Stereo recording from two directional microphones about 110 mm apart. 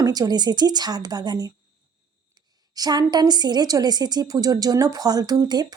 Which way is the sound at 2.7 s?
40° right (ahead or behind).